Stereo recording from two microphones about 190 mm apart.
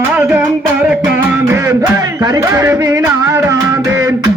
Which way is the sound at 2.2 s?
20° right (ahead or behind).